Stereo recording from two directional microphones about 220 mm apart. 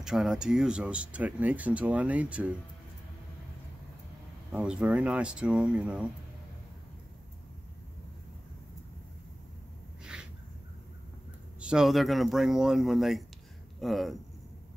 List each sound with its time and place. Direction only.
0.0 s speech: centre (ahead or behind)
4.5 s speech: 5° right (ahead or behind)
11.6 s speech: 5° right (ahead or behind)